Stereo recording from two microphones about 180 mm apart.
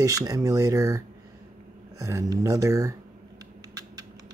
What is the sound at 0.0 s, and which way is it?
Speech, 20° right (ahead or behind).